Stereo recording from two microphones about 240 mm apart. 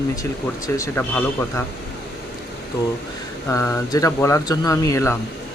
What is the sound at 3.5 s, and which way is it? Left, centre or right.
Speech, centre.